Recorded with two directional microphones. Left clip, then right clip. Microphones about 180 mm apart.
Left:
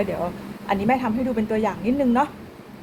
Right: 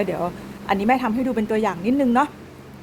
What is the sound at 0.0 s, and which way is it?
A woman's voice, 65° right (ahead or behind).